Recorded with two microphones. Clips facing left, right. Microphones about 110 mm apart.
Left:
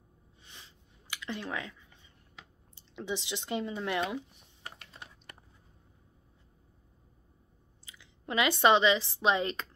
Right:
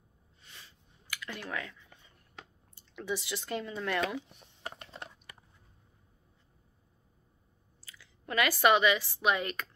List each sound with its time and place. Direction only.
0.4 s a sound: 20° left (ahead or behind)
3.0 s speech: 20° left (ahead or behind)
7.8 s a woman's voice: 20° left (ahead or behind)